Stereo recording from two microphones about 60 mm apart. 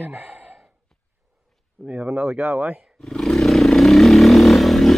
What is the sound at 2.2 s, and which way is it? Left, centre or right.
Speech, centre.